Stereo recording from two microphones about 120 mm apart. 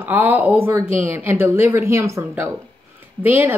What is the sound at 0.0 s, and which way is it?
A woman's voice, 15° right (ahead or behind).